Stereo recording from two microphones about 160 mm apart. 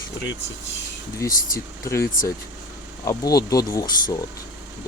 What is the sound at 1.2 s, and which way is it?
Speech, 20° left (ahead or behind).